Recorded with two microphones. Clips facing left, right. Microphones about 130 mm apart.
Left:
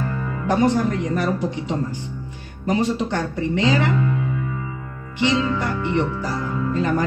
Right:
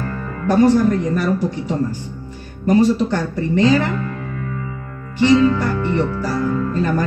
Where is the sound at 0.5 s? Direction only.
20° left (ahead or behind).